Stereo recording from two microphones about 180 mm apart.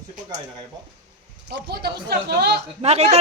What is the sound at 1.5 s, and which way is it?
Speech, 65° right (ahead or behind).